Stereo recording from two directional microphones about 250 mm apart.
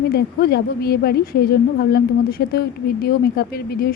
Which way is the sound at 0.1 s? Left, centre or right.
Left.